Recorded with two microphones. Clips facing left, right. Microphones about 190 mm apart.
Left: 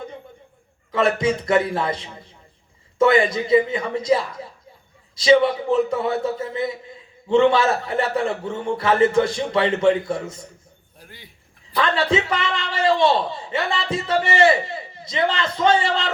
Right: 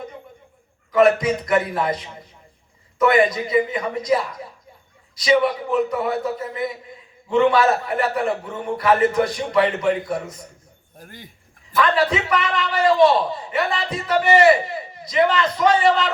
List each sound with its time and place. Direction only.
0.9 s a man's voice: 30° left (ahead or behind)
10.9 s speech: 45° right (ahead or behind)
11.8 s a man's voice: 25° left (ahead or behind)